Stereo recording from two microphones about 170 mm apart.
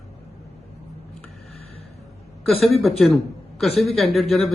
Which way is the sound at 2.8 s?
Centre (ahead or behind).